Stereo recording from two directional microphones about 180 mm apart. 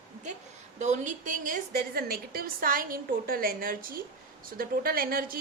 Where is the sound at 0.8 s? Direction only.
40° right (ahead or behind).